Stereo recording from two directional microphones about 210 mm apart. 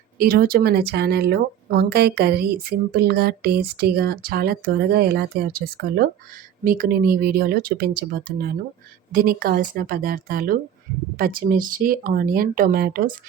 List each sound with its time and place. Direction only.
0.2 s speech: 45° right (ahead or behind)